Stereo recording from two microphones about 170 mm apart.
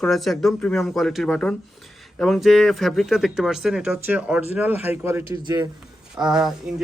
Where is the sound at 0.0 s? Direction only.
Centre (ahead or behind).